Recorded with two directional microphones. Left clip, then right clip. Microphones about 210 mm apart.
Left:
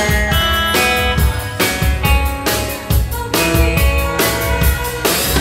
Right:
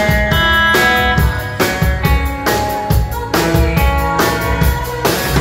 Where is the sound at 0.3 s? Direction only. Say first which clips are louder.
Right 4 dB; 10° right (ahead or behind).